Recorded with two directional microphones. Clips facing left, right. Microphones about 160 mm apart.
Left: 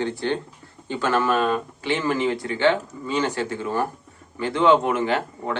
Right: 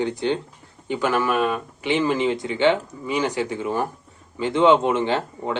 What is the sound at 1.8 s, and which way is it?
Speech, 15° right (ahead or behind).